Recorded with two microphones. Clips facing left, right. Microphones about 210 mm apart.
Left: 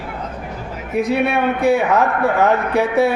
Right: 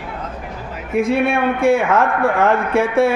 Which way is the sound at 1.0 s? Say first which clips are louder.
Right 1 dB; centre (ahead or behind).